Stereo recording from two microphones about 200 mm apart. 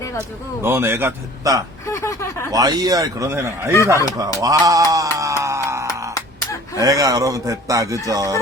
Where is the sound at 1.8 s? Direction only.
15° left (ahead or behind).